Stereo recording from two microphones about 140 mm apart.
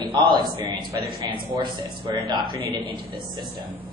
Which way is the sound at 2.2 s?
35° right (ahead or behind).